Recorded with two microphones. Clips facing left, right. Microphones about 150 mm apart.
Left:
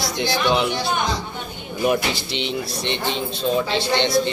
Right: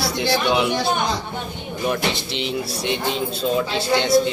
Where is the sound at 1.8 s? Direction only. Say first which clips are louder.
Left 2 dB; 5° left (ahead or behind).